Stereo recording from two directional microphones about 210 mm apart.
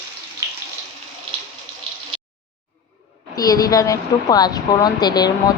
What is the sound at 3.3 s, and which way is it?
Speech, 15° left (ahead or behind).